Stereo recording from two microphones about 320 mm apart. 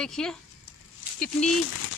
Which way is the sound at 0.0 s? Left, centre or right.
Centre.